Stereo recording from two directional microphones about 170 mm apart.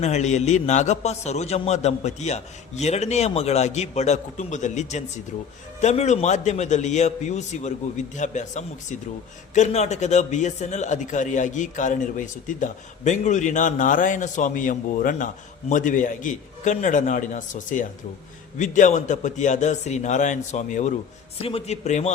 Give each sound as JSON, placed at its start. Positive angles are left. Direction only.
{"t": 0.0, "sound": "a man's voice", "side_deg": 40}